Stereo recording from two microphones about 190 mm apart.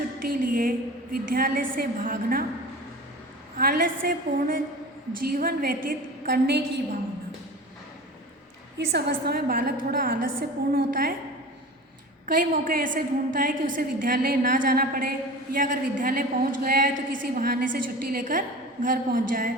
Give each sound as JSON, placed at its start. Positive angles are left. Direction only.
{"t": 0.2, "sound": "a woman's voice", "side_deg": -50}
{"t": 3.6, "sound": "a woman's voice", "side_deg": -50}
{"t": 8.9, "sound": "a woman's voice", "side_deg": -60}
{"t": 12.2, "sound": "a woman's voice", "side_deg": -45}